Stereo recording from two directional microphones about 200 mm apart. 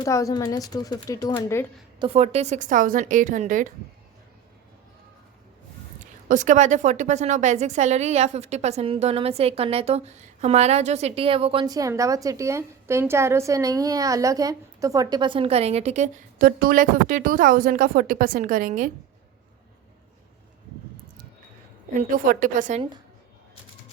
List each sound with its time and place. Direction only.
0.0 s speech: 15° left (ahead or behind)
2.0 s a woman's voice: 30° right (ahead or behind)
6.2 s a woman's voice: 40° right (ahead or behind)
16.4 s a woman's voice: 45° right (ahead or behind)
22.1 s a woman's voice: 40° right (ahead or behind)